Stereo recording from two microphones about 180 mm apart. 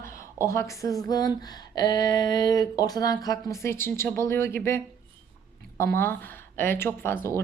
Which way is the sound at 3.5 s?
15° left (ahead or behind).